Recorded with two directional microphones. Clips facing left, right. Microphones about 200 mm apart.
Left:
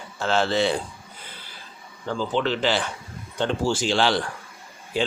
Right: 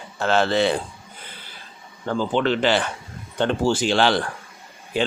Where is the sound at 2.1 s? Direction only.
55° right (ahead or behind).